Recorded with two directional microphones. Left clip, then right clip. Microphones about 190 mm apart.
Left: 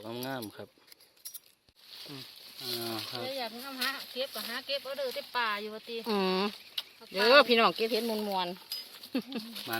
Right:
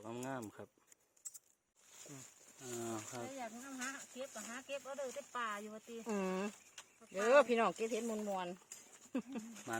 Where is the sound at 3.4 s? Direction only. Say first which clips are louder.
Left 11 dB; 40° left (ahead or behind).